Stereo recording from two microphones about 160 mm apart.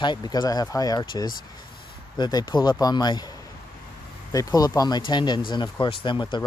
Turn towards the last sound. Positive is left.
turn(degrees=30)  # may be behind; listen again after turning